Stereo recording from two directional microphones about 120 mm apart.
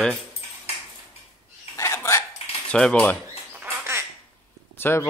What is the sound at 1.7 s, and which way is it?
Dishes, 25° left (ahead or behind).